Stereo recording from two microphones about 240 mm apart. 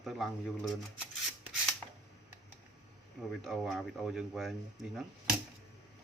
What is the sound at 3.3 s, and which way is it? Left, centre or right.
Speech, centre.